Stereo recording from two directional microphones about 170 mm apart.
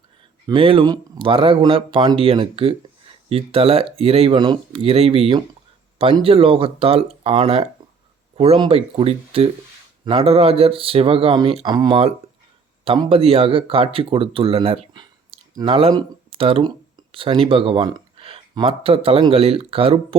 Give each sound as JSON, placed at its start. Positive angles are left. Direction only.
{"t": 0.4, "sound": "speech", "side_deg": -30}